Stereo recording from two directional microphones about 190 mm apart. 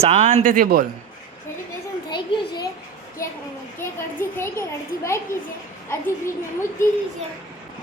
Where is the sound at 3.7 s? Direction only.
10° left (ahead or behind).